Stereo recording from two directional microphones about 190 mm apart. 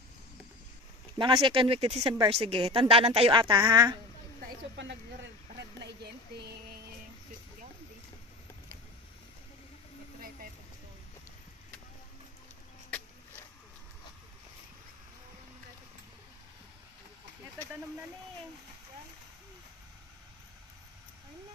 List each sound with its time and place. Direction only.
1.1 s a woman's voice: 25° right (ahead or behind)
4.8 s speech: 70° right (ahead or behind)